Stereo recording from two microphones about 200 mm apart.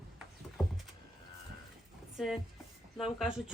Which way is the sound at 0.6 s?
Centre (ahead or behind).